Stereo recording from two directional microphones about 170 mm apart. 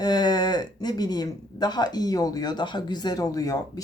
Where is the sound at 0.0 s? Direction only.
25° left (ahead or behind).